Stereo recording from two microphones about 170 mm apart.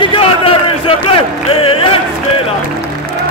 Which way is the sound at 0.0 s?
30° left (ahead or behind).